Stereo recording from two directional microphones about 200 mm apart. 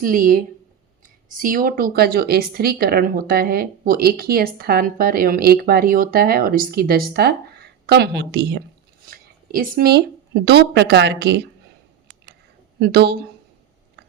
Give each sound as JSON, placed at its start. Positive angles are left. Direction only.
{"t": 0.0, "sound": "speech", "side_deg": -45}
{"t": 9.0, "sound": "speech", "side_deg": -45}
{"t": 12.8, "sound": "speech", "side_deg": -55}